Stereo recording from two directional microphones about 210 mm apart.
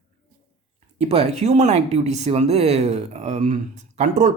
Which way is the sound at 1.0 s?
30° right (ahead or behind).